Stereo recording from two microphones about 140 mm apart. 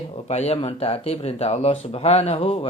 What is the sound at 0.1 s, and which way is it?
Speech, 50° left (ahead or behind).